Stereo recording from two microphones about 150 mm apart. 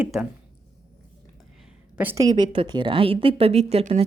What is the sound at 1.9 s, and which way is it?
Speech, 15° right (ahead or behind).